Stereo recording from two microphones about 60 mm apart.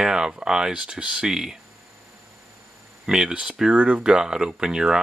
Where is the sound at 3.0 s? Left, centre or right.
Centre.